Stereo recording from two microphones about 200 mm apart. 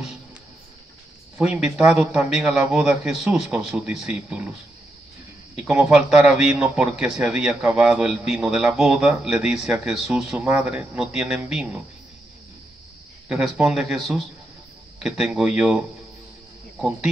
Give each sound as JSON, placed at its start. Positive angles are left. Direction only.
{"t": 1.4, "sound": "a man's voice", "side_deg": -5}
{"t": 5.6, "sound": "a man's voice", "side_deg": -5}
{"t": 13.3, "sound": "a man's voice", "side_deg": 0}